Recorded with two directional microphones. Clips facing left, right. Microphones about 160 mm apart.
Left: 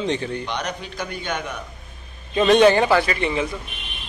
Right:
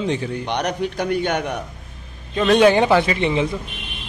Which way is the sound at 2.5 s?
10° right (ahead or behind).